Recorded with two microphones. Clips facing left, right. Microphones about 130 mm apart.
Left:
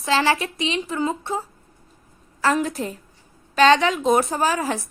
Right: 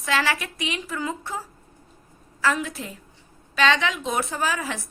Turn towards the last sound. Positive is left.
turn(degrees=40)  # may be behind; listen again after turning